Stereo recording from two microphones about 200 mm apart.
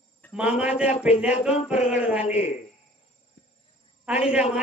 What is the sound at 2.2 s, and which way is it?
Speech, 35° left (ahead or behind).